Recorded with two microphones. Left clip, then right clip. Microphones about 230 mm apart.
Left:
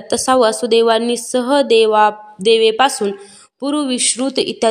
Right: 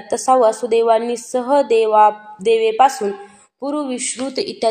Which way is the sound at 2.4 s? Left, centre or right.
Left.